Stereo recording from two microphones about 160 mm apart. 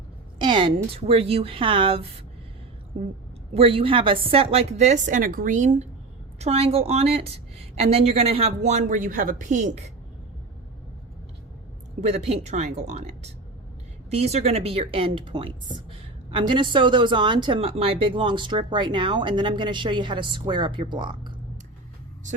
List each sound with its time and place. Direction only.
0.3 s a woman's voice: 30° right (ahead or behind)
3.5 s a woman's voice: 35° right (ahead or behind)
11.9 s a woman's voice: 45° right (ahead or behind)